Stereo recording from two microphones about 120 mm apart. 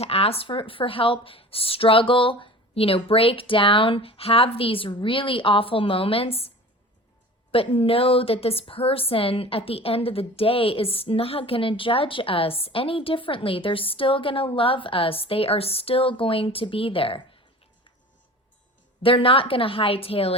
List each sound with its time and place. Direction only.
0.0 s a woman's voice: 55° left (ahead or behind)
7.5 s a woman's voice: 55° left (ahead or behind)
19.0 s a woman's voice: 50° left (ahead or behind)